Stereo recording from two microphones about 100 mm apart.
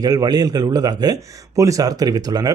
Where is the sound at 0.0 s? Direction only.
40° right (ahead or behind).